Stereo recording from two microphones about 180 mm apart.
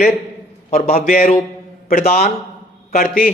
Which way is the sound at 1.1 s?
50° left (ahead or behind).